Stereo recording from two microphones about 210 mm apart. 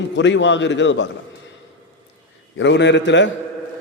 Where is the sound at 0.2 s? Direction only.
60° left (ahead or behind).